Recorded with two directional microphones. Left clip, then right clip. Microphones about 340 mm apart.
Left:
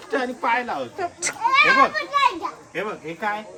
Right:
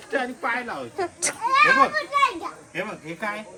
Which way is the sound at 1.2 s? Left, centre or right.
Centre.